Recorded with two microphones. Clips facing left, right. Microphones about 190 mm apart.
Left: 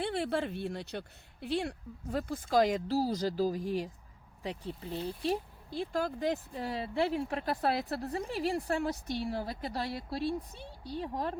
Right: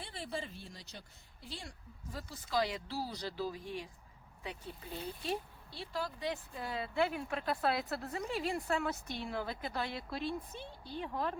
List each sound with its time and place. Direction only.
0.0 s speech: 65° left (ahead or behind); by 3.8 s 40° left (ahead or behind)
5.2 s speech: 40° left (ahead or behind)